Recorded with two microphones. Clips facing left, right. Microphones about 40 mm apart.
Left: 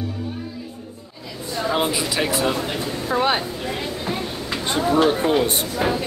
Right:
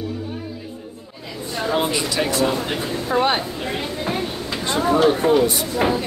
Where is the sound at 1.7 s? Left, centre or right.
Centre.